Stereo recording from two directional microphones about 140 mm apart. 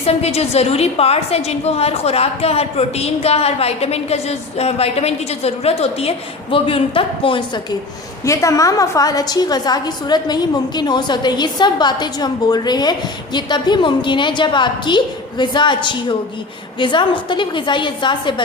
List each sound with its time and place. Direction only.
0.0 s a woman's voice: 45° left (ahead or behind)
8.2 s a woman's voice: 20° left (ahead or behind)